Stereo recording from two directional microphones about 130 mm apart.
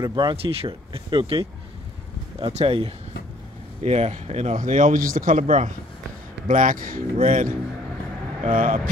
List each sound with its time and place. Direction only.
0.0 s speech: 35° right (ahead or behind); by 2.9 s 50° right (ahead or behind)
3.8 s speech: 60° right (ahead or behind)
4.6 s speech: 90° right